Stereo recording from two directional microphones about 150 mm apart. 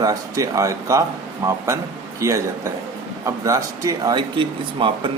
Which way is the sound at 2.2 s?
20° right (ahead or behind).